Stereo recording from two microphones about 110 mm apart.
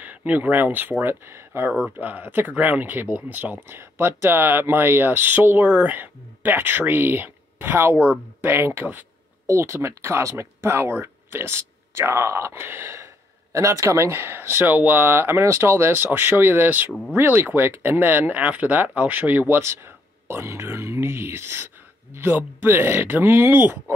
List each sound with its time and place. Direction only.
0.0 s speech: 15° right (ahead or behind)